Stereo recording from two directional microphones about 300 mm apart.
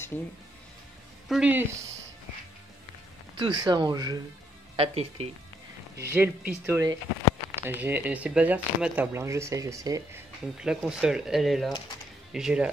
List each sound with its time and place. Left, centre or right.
1.3 s speech: centre
3.3 s speech: centre
6.1 s speech: centre